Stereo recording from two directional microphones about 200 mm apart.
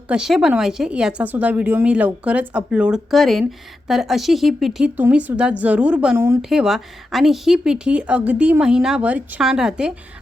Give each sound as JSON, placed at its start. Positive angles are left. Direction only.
{"t": 0.1, "sound": "speech", "side_deg": -5}